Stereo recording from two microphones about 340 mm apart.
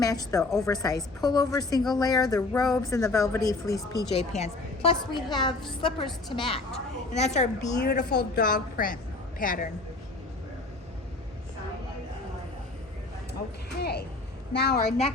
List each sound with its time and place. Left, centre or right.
0.3 s a woman's voice: centre
13.7 s a woman's voice: left